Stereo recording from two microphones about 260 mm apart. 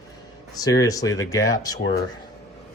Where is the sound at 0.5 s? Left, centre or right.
Centre.